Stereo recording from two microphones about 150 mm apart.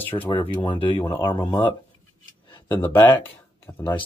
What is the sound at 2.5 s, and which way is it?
Speech, 15° left (ahead or behind).